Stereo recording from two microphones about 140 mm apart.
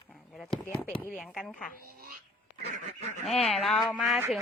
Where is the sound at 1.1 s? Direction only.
5° right (ahead or behind).